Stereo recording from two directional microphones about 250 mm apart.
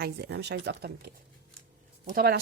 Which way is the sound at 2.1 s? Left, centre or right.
Right.